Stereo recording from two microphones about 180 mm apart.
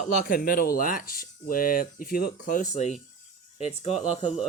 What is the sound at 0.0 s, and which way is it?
Speech, 50° left (ahead or behind).